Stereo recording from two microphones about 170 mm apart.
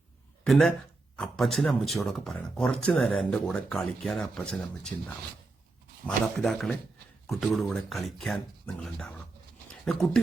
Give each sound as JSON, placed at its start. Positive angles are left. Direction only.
{"t": 0.4, "sound": "speech", "side_deg": 0}